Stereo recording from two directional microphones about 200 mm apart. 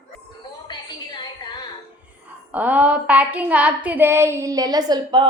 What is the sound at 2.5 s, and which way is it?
A woman's voice, 5° right (ahead or behind).